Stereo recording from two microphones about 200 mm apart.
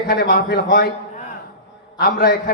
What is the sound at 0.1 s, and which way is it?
A man's voice, 45° left (ahead or behind).